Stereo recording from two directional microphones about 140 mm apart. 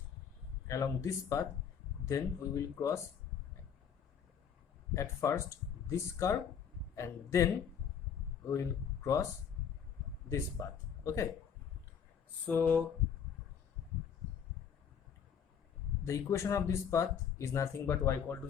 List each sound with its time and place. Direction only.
0.7 s speech: 25° left (ahead or behind)
4.9 s speech: 20° left (ahead or behind)
10.2 s speech: 20° left (ahead or behind)
12.5 s speech: 15° left (ahead or behind)
16.0 s speech: 20° left (ahead or behind)